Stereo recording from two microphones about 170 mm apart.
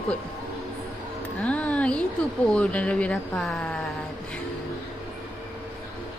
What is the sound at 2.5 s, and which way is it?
Speech, 5° left (ahead or behind).